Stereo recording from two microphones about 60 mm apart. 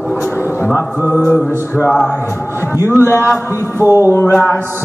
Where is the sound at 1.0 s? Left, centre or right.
Left.